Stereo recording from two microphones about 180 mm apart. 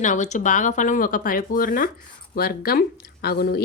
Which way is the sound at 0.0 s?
40° left (ahead or behind).